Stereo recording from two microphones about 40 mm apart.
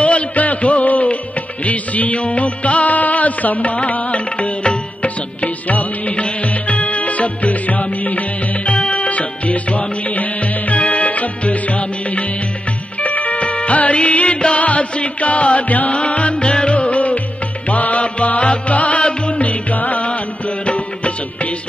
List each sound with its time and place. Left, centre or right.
0.0 s music: left